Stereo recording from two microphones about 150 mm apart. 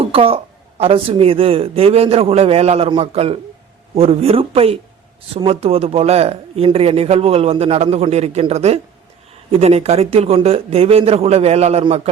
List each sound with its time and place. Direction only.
0.0 s a man's voice: 40° right (ahead or behind)